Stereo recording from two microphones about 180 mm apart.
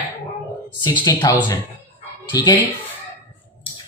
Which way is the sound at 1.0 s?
20° left (ahead or behind).